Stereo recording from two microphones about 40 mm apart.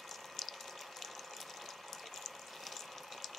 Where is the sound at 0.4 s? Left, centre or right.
Centre.